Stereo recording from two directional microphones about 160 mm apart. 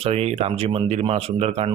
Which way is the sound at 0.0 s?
40° right (ahead or behind).